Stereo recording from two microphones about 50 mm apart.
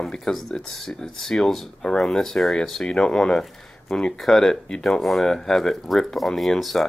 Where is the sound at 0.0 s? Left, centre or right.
Centre.